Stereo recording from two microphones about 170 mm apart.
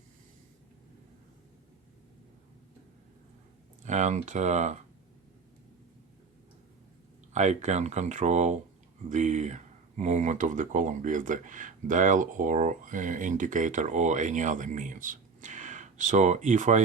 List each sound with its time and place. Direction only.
3.8 s speech: 45° right (ahead or behind)
7.3 s speech: 45° right (ahead or behind)